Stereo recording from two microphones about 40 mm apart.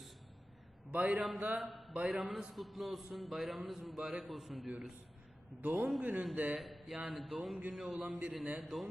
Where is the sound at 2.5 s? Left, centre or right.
Centre.